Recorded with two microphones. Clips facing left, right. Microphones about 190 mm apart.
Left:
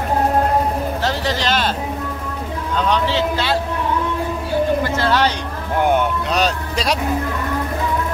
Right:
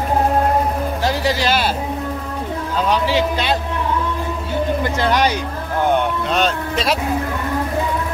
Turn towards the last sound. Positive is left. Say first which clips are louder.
# right 1 dB
turn(degrees=0)  # may be behind; listen again after turning